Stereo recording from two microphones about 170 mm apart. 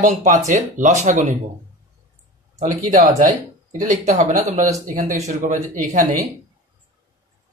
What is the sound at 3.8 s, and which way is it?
Speech, 45° right (ahead or behind).